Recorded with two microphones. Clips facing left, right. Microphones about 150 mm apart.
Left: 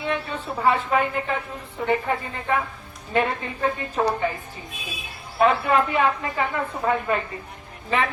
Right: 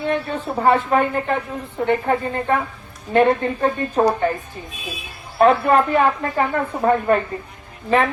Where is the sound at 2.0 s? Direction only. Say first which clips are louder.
Right 6 dB; 45° right (ahead or behind).